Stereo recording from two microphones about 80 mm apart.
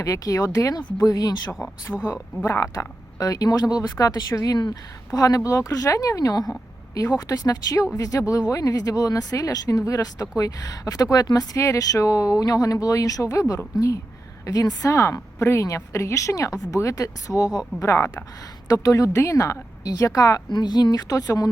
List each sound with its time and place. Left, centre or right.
0.0 s speech: left
1.5 s speech: left
2.7 s speech: left
17.7 s speech: left
20.5 s speech: left